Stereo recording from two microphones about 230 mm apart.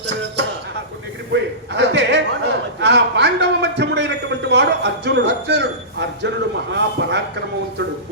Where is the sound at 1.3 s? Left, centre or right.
Right.